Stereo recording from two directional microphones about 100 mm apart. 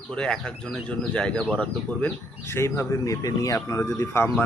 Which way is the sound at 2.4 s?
25° left (ahead or behind).